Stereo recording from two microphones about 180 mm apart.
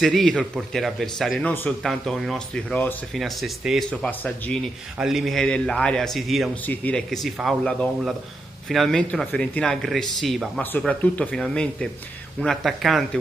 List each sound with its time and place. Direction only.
0.0 s a man's voice: centre (ahead or behind)